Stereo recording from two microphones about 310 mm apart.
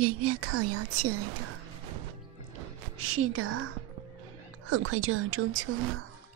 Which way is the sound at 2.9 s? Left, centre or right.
Right.